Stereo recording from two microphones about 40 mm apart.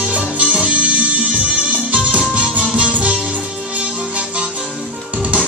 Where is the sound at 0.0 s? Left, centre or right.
Right.